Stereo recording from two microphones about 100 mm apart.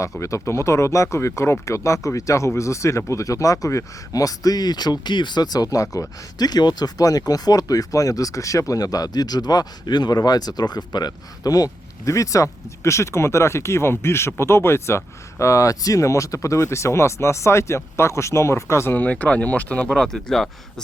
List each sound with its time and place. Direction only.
0.2 s speech: 30° left (ahead or behind); by 20.8 s 5° left (ahead or behind)